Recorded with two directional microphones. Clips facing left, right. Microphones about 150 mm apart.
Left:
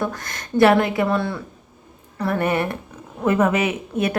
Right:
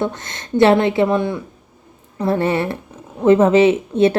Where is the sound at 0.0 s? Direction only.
25° right (ahead or behind).